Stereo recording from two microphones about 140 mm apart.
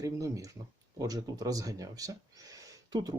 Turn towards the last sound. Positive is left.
turn(degrees=-25)  # may be behind; listen again after turning